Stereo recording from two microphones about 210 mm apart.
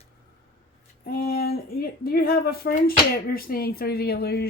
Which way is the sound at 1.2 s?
45° left (ahead or behind).